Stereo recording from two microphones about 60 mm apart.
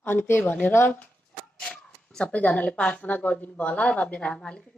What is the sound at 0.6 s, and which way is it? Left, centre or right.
Speech, left.